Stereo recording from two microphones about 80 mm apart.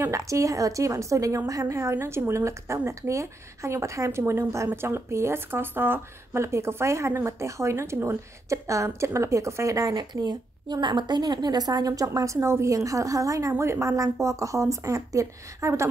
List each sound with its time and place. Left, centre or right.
0.0 s speech: right
10.2 s a woman's voice: right